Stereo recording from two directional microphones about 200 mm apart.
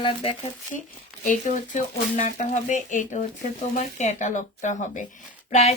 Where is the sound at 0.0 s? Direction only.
25° left (ahead or behind).